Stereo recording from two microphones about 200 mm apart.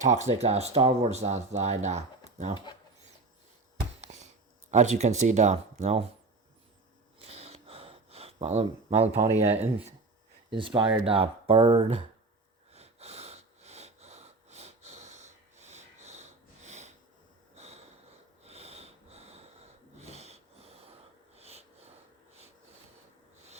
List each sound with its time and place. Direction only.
0.0 s speech: 35° right (ahead or behind)
4.0 s a sound: 35° right (ahead or behind)
4.7 s speech: 35° right (ahead or behind)
7.2 s gasp: 30° right (ahead or behind)
9.5 s speech: 30° right (ahead or behind)
12.7 s a sound: 30° right (ahead or behind)
17.5 s snort: 30° right (ahead or behind)
21.3 s sniff: 30° right (ahead or behind)